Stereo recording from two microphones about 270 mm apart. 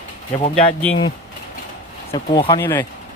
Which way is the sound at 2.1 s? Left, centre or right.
Centre.